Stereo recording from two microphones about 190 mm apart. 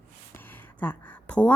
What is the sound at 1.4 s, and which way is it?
Speech, 5° left (ahead or behind).